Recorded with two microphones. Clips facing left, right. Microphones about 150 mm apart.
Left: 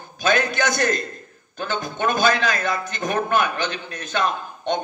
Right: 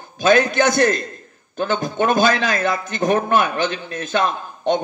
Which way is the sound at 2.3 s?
30° right (ahead or behind).